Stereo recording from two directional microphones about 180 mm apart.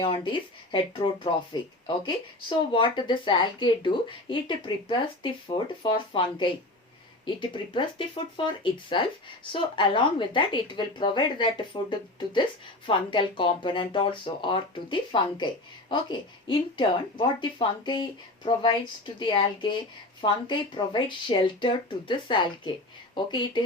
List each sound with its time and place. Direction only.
0.0 s speech: 30° left (ahead or behind)